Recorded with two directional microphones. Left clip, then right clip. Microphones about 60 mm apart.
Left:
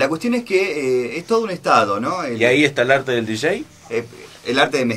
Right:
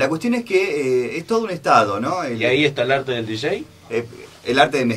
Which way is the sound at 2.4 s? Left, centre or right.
Left.